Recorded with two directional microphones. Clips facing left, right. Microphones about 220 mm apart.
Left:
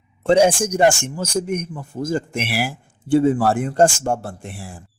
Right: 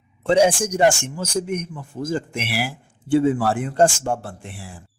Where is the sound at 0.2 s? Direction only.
45° left (ahead or behind).